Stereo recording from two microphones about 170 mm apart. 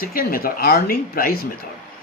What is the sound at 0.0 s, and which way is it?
Speech, 60° left (ahead or behind).